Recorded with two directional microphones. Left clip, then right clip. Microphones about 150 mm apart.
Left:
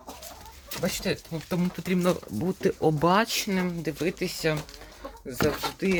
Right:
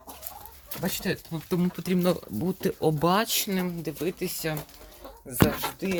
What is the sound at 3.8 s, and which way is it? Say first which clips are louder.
Speech: left 2 dB; 15° left (ahead or behind).